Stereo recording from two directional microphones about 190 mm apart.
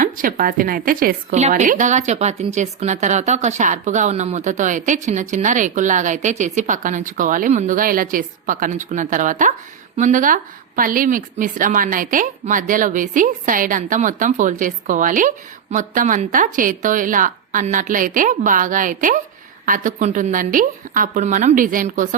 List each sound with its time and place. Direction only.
0.0 s a woman's voice: 45° right (ahead or behind)